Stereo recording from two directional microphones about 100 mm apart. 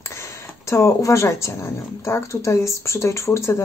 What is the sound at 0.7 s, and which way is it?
Speech, 30° left (ahead or behind).